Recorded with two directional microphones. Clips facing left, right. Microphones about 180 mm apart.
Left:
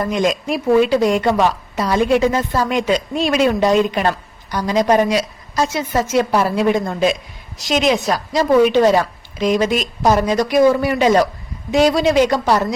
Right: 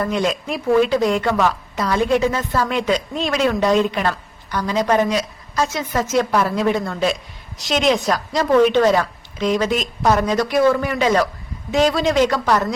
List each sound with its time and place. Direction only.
0.0 s a woman's voice: 10° left (ahead or behind)
2.3 s speech: 35° left (ahead or behind)
2.6 s a woman's voice: 10° left (ahead or behind)
11.0 s speech: 30° left (ahead or behind)
11.7 s a woman's voice: 10° left (ahead or behind)